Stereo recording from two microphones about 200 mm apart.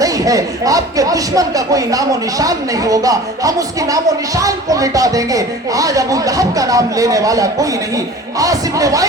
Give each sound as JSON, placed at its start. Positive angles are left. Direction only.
{"t": 0.0, "sound": "speech", "side_deg": -15}